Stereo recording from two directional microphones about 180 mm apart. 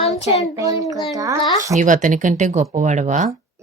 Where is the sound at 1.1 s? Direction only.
20° right (ahead or behind).